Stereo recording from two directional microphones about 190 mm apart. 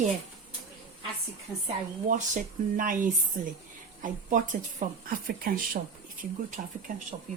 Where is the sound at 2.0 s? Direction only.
45° right (ahead or behind).